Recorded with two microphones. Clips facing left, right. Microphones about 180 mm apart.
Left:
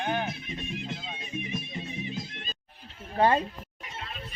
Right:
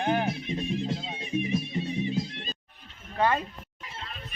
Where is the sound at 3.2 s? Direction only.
30° left (ahead or behind).